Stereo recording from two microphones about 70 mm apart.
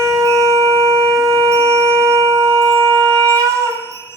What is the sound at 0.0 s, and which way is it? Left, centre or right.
Shofar, right.